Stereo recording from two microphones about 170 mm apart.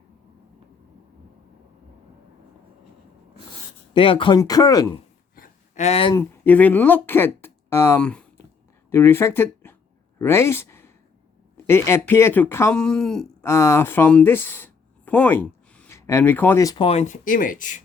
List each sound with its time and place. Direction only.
3.9 s speech: 30° left (ahead or behind)
5.4 s a sound: 45° left (ahead or behind)
6.1 s speech: 10° left (ahead or behind)
13.4 s speech: 15° left (ahead or behind)
17.0 s speech: 50° left (ahead or behind)